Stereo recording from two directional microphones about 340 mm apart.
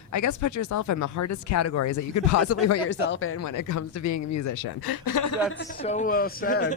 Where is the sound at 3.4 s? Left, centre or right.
Left.